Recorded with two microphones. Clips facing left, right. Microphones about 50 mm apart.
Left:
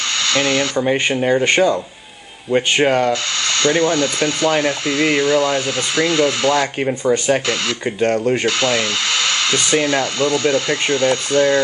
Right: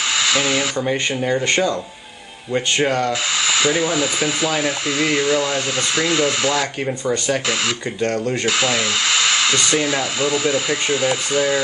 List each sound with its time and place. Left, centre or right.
0.1 s a sound: centre
0.7 s speech: left
3.1 s speech: centre
7.1 s speech: centre
8.5 s speech: centre